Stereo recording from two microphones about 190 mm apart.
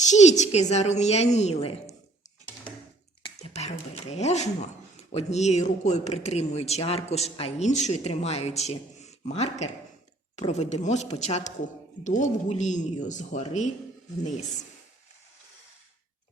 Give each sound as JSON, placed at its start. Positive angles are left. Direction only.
{"t": 0.0, "sound": "speech", "side_deg": 40}
{"t": 3.2, "sound": "a sound", "side_deg": 30}
{"t": 4.9, "sound": "speech", "side_deg": 35}